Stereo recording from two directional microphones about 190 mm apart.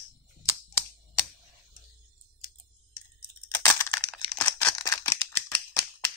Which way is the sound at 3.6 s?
15° left (ahead or behind).